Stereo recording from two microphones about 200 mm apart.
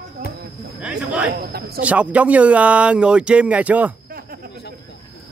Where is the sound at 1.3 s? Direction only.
50° right (ahead or behind).